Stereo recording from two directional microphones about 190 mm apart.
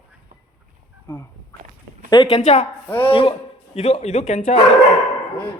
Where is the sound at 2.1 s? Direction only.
30° left (ahead or behind).